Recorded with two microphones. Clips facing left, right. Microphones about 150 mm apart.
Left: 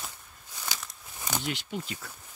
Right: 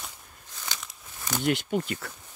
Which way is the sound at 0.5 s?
5° left (ahead or behind).